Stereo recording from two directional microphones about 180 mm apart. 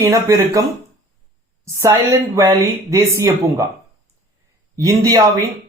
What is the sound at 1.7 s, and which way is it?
Speech, 15° right (ahead or behind).